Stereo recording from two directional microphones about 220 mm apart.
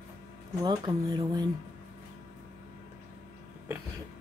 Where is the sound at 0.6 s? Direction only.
20° right (ahead or behind).